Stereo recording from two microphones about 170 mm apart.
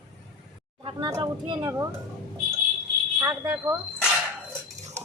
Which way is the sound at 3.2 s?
20° right (ahead or behind).